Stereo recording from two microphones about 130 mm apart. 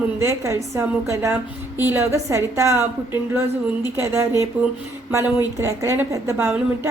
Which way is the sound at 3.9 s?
20° right (ahead or behind).